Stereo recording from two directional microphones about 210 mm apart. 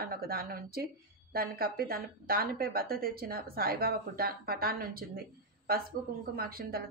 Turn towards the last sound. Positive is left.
turn(degrees=-45)  # may be behind; listen again after turning